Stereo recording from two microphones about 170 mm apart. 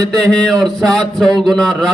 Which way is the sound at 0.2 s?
5° left (ahead or behind).